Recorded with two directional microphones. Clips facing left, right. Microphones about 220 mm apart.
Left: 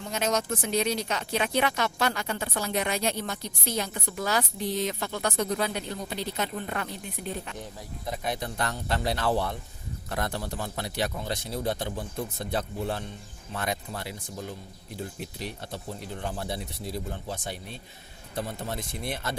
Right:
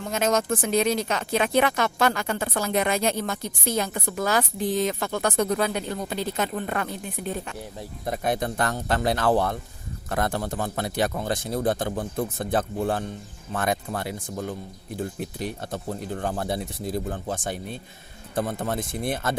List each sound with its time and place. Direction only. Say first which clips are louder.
0.1 s speech: right 5 dB; 50° right (ahead or behind)
3.9 s a woman's voice: right 5 dB; 75° right (ahead or behind)
4.3 s speech: right 4 dB; 50° right (ahead or behind)
8.0 s speech: right 6 dB; 50° right (ahead or behind)